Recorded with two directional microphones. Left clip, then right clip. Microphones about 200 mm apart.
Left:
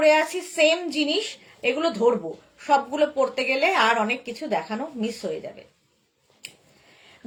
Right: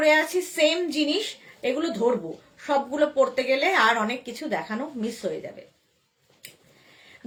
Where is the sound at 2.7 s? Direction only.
20° right (ahead or behind).